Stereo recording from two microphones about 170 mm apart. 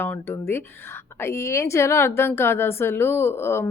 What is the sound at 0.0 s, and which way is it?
A woman's voice, 10° left (ahead or behind).